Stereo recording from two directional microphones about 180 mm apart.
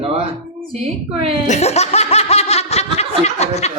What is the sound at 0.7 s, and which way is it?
Speech, 30° right (ahead or behind).